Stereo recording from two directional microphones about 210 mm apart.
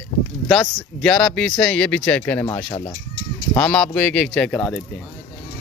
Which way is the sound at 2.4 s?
20° left (ahead or behind).